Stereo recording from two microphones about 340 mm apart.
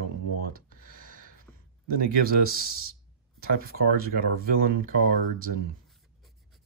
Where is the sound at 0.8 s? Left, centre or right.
Right.